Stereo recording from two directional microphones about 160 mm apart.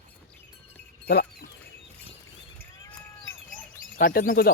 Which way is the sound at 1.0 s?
85° left.